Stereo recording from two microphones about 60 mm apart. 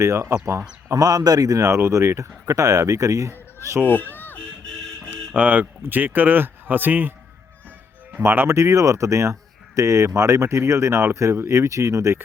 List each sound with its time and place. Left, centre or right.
0.0 s speech: right
0.9 s speech: right
3.8 s speech: left
4.4 s music: centre
5.3 s speech: right
8.2 s speech: right
8.5 s speech: right